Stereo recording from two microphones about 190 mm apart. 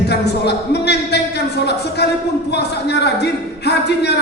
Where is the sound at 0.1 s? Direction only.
60° left (ahead or behind).